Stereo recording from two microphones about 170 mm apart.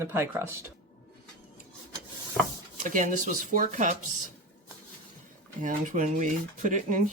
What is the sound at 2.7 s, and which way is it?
Speech, 50° right (ahead or behind).